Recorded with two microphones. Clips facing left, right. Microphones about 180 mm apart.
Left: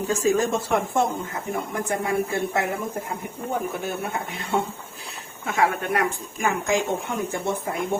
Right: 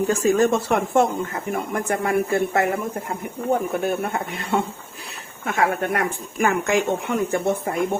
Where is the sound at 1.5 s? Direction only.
60° right (ahead or behind).